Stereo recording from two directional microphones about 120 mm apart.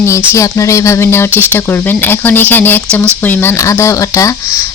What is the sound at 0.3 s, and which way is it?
Speech, 25° left (ahead or behind).